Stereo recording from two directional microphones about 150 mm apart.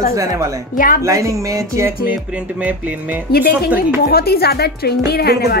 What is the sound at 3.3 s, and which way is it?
Speech, 90° left.